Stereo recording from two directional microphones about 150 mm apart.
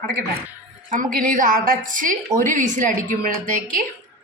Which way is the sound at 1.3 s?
65° right (ahead or behind).